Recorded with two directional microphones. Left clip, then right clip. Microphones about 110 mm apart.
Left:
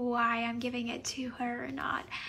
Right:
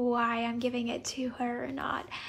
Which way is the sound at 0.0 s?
25° right (ahead or behind).